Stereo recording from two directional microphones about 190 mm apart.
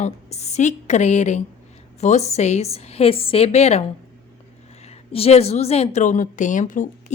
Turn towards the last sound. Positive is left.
turn(degrees=45)  # may be behind; listen again after turning